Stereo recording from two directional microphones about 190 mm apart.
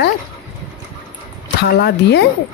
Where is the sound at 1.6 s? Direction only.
60° left (ahead or behind).